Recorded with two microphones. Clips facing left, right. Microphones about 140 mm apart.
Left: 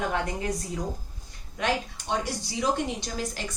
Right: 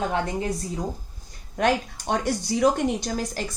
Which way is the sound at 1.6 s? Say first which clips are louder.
Right 5 dB; 45° right (ahead or behind).